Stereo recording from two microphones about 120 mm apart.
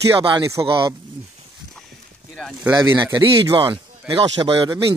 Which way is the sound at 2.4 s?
5° left (ahead or behind).